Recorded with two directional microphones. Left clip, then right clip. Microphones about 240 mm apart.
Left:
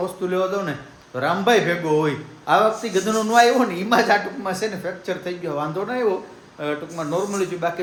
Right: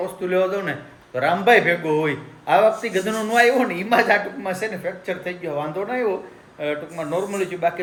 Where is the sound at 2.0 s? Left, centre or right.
Centre.